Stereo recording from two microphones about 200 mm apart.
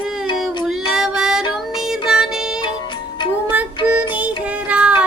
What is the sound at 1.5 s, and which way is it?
Music, centre (ahead or behind).